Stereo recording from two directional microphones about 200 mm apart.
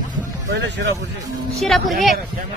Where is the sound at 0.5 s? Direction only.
60° right (ahead or behind).